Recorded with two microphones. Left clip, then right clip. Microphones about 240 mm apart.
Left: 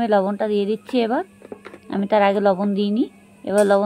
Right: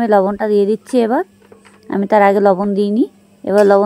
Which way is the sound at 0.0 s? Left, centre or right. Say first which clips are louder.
Right 6 dB; right.